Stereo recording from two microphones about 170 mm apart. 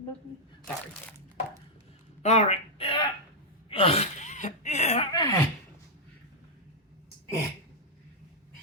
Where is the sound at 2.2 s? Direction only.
40° left (ahead or behind).